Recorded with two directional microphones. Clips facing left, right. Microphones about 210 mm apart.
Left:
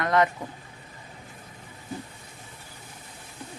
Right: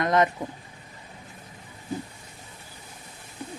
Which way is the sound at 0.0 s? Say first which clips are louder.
Right 1 dB; 20° right (ahead or behind).